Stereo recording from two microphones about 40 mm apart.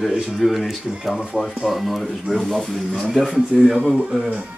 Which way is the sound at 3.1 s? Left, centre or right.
Centre.